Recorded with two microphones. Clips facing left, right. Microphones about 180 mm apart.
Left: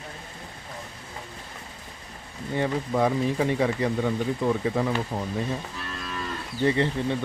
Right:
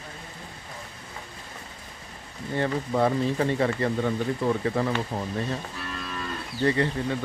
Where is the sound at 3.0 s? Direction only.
5° left (ahead or behind).